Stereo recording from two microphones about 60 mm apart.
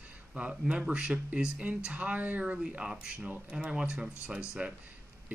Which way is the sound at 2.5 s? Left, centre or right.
Centre.